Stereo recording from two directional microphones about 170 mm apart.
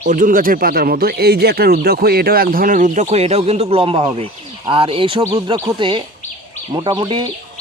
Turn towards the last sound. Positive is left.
turn(degrees=-25)  # may be behind; listen again after turning